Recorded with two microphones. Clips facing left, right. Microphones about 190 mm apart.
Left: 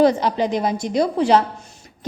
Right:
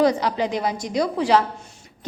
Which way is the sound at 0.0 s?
25° left (ahead or behind).